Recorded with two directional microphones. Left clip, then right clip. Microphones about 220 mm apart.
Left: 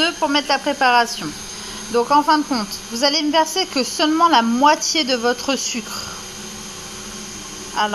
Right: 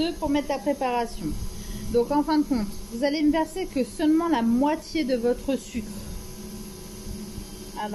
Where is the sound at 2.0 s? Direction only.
40° left (ahead or behind).